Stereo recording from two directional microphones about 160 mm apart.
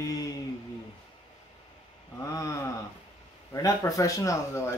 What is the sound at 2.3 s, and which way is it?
Speech, 20° left (ahead or behind).